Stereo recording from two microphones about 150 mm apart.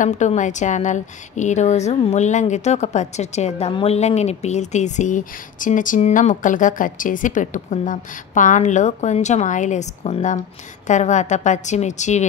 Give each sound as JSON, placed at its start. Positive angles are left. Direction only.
{"t": 0.0, "sound": "speech", "side_deg": 55}